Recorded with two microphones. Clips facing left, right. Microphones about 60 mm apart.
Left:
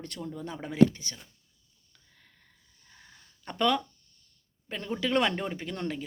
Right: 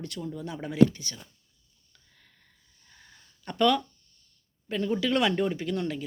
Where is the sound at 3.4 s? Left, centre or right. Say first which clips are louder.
Right 3 dB; left.